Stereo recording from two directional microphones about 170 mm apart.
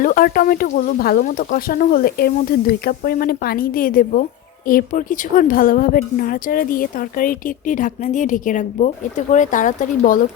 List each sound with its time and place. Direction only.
0.0 s speech: 55° left (ahead or behind)